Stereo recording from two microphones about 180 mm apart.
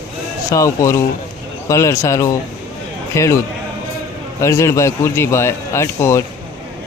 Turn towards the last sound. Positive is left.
turn(degrees=15)  # may be behind; listen again after turning